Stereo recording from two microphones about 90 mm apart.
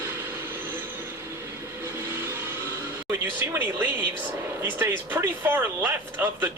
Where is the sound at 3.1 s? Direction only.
25° right (ahead or behind).